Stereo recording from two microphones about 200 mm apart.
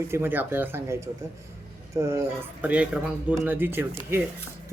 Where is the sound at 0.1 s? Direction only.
10° right (ahead or behind).